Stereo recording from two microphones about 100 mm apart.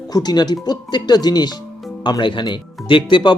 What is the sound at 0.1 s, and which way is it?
Speech, 45° left (ahead or behind).